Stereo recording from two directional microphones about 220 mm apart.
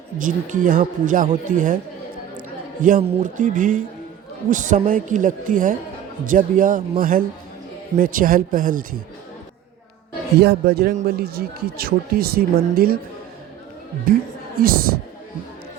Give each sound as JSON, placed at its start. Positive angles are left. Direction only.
{"t": 0.2, "sound": "speech", "side_deg": -35}
{"t": 2.8, "sound": "speech", "side_deg": -35}
{"t": 10.4, "sound": "speech", "side_deg": -45}
{"t": 14.1, "sound": "speech", "side_deg": -40}